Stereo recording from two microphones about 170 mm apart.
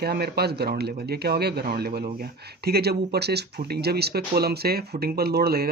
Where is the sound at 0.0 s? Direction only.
70° right (ahead or behind).